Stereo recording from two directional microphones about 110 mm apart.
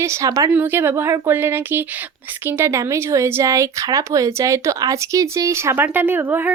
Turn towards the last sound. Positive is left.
turn(degrees=-20)  # may be behind; listen again after turning